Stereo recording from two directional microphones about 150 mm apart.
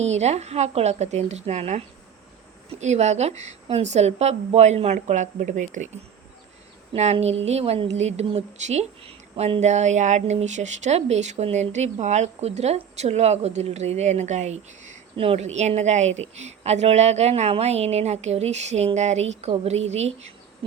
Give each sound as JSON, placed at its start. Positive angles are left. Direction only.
{"t": 0.0, "sound": "speech", "side_deg": -45}
{"t": 15.1, "sound": "speech", "side_deg": -40}